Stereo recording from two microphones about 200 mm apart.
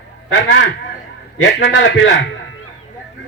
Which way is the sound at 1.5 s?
60° left (ahead or behind).